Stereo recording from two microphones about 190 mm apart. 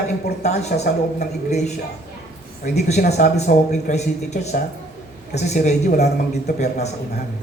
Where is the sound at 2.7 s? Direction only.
35° left (ahead or behind).